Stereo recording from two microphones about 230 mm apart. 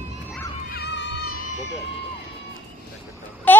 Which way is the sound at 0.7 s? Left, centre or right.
Left.